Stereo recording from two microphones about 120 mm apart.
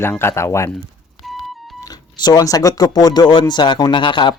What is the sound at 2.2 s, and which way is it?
Speech, 30° left (ahead or behind).